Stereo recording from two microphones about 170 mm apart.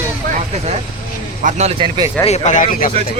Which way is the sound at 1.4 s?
40° right (ahead or behind).